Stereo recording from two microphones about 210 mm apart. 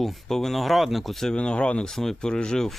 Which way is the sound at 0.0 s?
Centre (ahead or behind).